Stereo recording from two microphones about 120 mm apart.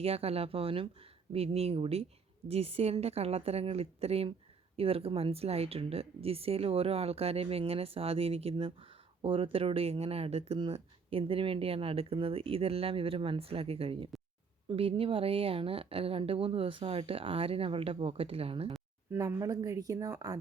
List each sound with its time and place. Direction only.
0.0 s a woman's voice: 55° right (ahead or behind)
19.1 s speech: 25° right (ahead or behind)